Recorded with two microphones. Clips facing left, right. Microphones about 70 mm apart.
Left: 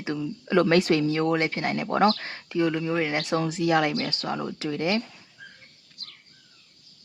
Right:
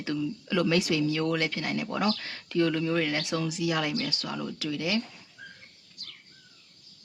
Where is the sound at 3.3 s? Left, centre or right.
Left.